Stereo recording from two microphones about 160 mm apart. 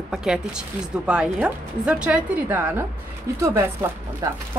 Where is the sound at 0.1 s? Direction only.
5° right (ahead or behind); by 4.4 s 20° right (ahead or behind).